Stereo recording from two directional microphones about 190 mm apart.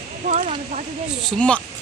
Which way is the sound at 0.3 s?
40° right (ahead or behind).